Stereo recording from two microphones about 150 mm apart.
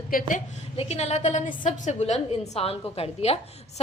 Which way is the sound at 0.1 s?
65° left (ahead or behind).